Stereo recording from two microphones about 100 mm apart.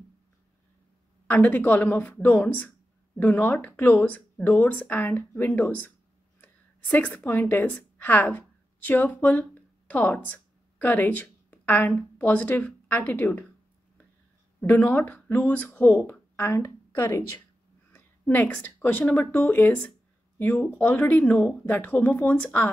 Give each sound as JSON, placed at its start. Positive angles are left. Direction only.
{"t": 1.2, "sound": "a woman's voice", "side_deg": 15}
{"t": 14.6, "sound": "a woman's voice", "side_deg": 20}